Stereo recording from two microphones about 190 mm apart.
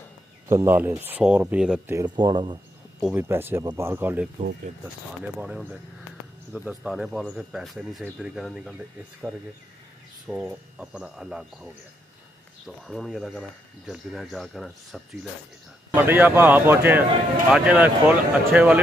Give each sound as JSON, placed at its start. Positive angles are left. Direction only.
{"t": 0.5, "sound": "speech", "side_deg": -15}
{"t": 2.0, "sound": "speech", "side_deg": -20}
{"t": 3.0, "sound": "speech", "side_deg": -5}
{"t": 15.9, "sound": "speech", "side_deg": -10}